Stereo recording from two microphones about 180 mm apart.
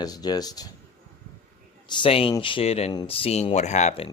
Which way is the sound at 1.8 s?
25° left (ahead or behind).